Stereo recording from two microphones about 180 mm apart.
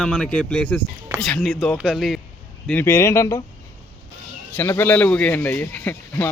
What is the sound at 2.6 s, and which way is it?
Speech, 10° left (ahead or behind).